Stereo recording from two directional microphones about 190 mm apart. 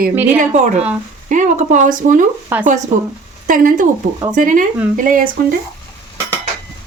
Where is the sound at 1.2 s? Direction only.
40° right (ahead or behind).